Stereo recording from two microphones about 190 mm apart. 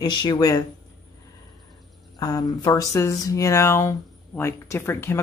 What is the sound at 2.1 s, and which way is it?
Speech, 20° left (ahead or behind).